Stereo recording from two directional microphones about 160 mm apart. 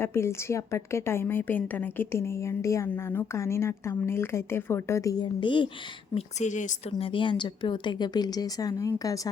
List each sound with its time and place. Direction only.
0.0 s a woman's voice: 15° left (ahead or behind)
6.1 s a woman's voice: 50° left (ahead or behind)
6.9 s speech: 30° left (ahead or behind)